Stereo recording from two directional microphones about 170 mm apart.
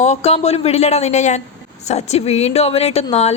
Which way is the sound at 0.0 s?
40° left (ahead or behind).